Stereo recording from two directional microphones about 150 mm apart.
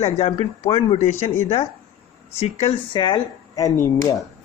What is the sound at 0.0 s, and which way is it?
Speech, 45° left (ahead or behind).